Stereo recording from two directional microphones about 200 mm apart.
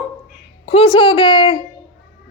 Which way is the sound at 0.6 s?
30° left (ahead or behind).